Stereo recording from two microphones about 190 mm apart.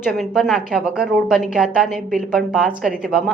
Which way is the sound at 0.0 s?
Centre (ahead or behind).